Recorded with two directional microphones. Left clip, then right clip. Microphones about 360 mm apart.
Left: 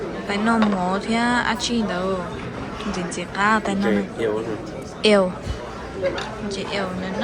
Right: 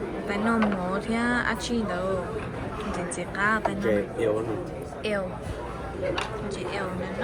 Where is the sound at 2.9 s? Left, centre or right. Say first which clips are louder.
Left 5 dB; centre.